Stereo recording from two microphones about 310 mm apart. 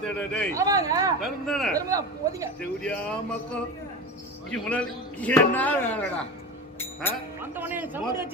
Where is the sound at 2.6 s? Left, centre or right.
Centre.